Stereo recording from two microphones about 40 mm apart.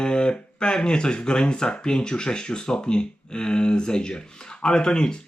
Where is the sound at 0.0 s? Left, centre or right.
Left.